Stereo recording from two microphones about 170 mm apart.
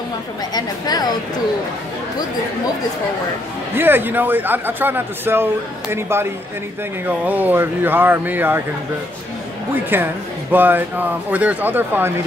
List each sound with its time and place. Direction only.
0.6 s a woman's voice: 25° left (ahead or behind)
3.7 s a man's voice: 10° right (ahead or behind)
9.9 s a man's voice: 10° right (ahead or behind)